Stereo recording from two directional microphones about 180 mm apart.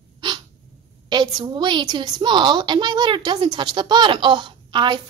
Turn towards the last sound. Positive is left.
turn(degrees=-25)  # may be behind; listen again after turning